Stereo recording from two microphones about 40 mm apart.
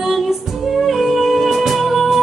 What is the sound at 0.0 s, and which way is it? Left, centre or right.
Music, centre.